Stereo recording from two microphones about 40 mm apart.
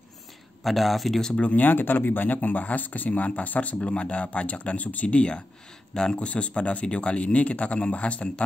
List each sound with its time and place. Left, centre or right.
0.7 s speech: centre
1.4 s speech: left
1.7 s speech: left
3.8 s speech: left